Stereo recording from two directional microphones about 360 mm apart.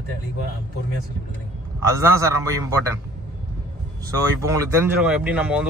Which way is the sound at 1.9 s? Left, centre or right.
Centre.